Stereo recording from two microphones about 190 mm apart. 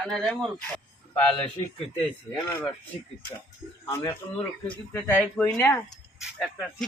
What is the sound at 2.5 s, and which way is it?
Speech, 10° left (ahead or behind).